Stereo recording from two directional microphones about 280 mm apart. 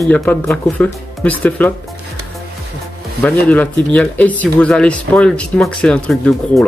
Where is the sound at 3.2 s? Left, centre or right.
Centre.